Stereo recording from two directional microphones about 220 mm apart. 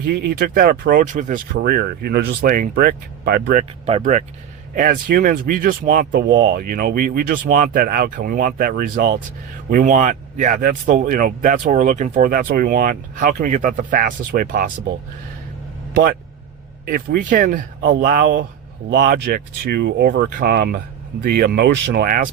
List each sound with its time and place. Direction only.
0.0 s speech: 45° right (ahead or behind)
6.1 s speech: 50° right (ahead or behind)
16.8 s speech: 40° right (ahead or behind)